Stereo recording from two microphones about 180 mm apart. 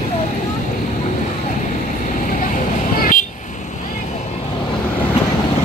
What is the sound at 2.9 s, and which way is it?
Vehicle, 50° left (ahead or behind).